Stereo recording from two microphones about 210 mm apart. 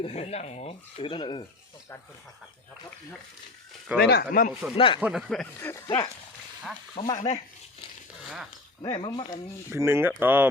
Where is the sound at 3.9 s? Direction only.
50° left (ahead or behind).